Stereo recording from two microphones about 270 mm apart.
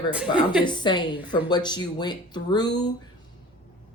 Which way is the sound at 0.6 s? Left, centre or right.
Centre.